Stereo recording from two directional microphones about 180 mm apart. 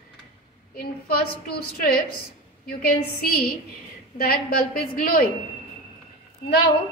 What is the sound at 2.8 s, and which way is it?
A woman's voice, 55° left (ahead or behind).